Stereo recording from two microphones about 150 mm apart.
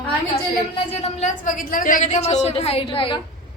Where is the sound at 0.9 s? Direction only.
50° left (ahead or behind).